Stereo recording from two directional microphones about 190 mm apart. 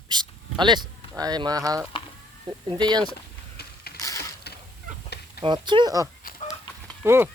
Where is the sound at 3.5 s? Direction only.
55° left (ahead or behind).